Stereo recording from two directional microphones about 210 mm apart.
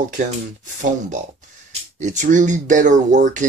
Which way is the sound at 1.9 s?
35° right (ahead or behind).